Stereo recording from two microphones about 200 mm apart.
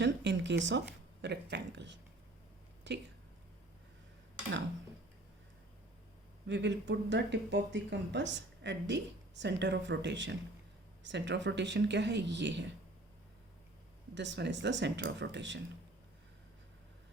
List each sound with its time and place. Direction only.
0.0 s speech: 60° right (ahead or behind)
6.5 s speech: 60° right (ahead or behind)
14.2 s speech: 60° right (ahead or behind)